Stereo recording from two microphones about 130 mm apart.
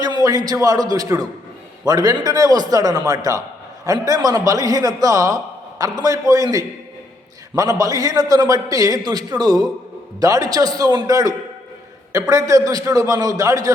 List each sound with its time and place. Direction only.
0.0 s a man's voice: 30° right (ahead or behind)